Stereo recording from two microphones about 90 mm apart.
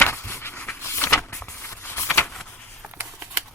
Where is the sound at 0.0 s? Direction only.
25° left (ahead or behind).